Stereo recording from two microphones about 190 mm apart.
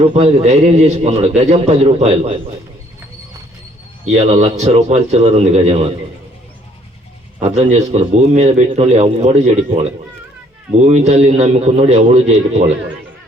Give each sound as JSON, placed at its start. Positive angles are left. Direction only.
{"t": 0.0, "sound": "a man's voice", "side_deg": -30}
{"t": 4.0, "sound": "a man's voice", "side_deg": -35}
{"t": 7.4, "sound": "a man's voice", "side_deg": -35}
{"t": 10.8, "sound": "a man's voice", "side_deg": -35}